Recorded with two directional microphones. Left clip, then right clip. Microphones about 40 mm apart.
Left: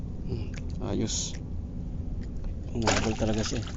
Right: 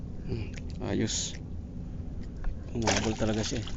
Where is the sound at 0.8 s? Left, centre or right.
Right.